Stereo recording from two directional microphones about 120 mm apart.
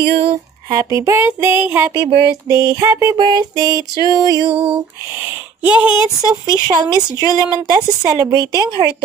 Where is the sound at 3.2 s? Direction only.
35° right (ahead or behind).